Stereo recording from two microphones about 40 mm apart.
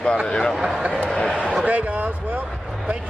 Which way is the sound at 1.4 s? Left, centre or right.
Right.